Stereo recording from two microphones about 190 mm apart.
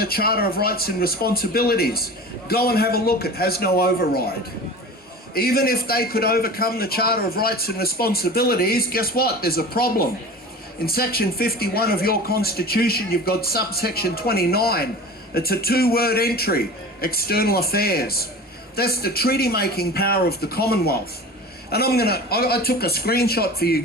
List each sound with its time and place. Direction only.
0.0 s a man's voice: 55° left (ahead or behind)
5.3 s a man's voice: 50° left (ahead or behind)